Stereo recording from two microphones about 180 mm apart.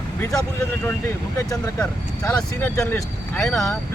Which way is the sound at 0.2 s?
20° left (ahead or behind).